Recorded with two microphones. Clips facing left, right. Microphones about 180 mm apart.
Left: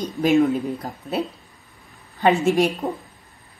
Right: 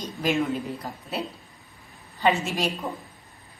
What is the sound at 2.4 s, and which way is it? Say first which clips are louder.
Speech: left 10 dB; 55° left (ahead or behind).